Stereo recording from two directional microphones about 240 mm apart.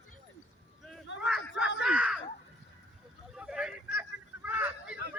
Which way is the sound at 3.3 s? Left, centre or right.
Centre.